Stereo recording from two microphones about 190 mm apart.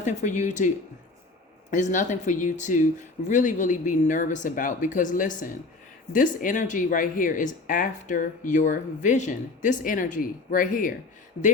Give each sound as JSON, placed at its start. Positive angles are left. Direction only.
{"t": 0.0, "sound": "speech", "side_deg": 40}
{"t": 1.7, "sound": "speech", "side_deg": 40}